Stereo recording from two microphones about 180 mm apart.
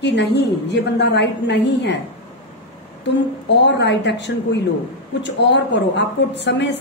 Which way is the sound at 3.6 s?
75° left (ahead or behind).